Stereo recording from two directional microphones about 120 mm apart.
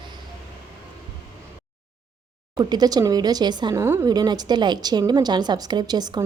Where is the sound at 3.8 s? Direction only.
25° right (ahead or behind).